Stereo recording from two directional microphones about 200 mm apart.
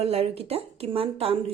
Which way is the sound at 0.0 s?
30° right (ahead or behind).